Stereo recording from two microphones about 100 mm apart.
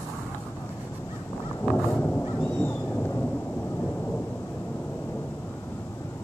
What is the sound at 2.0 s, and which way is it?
Cat, 15° left (ahead or behind).